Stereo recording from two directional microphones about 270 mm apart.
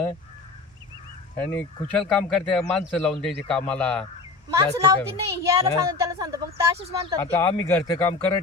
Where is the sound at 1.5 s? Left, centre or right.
Centre.